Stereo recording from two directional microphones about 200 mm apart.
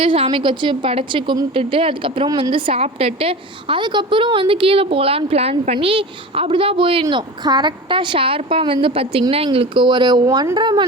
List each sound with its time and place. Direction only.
0.0 s a woman's voice: 25° right (ahead or behind)